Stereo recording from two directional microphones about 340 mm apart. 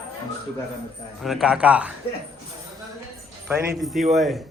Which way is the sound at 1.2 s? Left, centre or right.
Centre.